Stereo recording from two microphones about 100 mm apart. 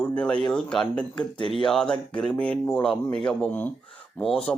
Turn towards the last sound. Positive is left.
turn(degrees=5)  # may be behind; listen again after turning